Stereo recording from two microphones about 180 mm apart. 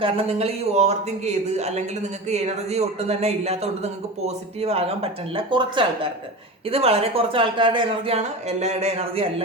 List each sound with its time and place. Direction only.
0.0 s speech: 35° right (ahead or behind)